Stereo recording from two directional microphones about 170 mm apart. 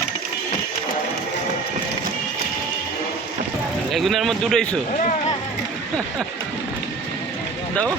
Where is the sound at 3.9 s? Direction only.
Centre (ahead or behind).